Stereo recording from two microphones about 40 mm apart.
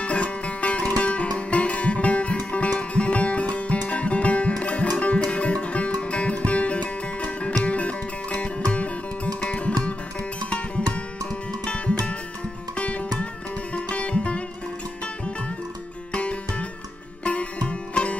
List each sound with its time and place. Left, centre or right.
0.0 s music: left
11.6 s music: left
12.7 s sitar: left
16.1 s sitar: left